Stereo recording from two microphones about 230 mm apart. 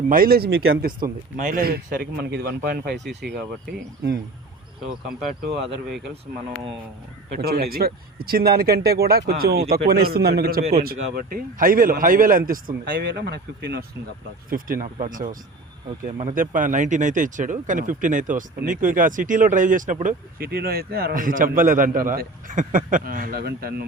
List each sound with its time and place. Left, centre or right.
0.1 s speech: right
7.3 s speech: right
10.6 s speech: right
10.8 s speech: right